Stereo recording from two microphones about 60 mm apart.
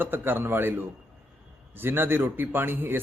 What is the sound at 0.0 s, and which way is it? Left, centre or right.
Speech, right.